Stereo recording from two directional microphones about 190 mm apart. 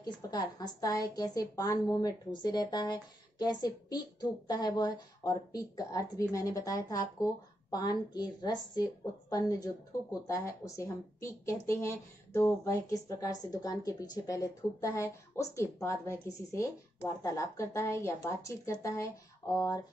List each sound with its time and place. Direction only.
0.0 s a woman's voice: 20° left (ahead or behind)